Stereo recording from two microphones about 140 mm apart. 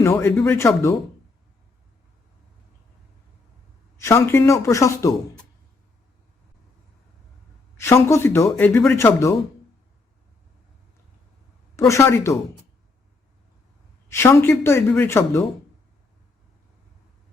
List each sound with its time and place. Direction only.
0.0 s speech: 20° left (ahead or behind)
3.9 s speech: 20° left (ahead or behind)
7.8 s speech: 20° left (ahead or behind)
11.9 s speech: 20° left (ahead or behind)
14.1 s speech: 20° left (ahead or behind)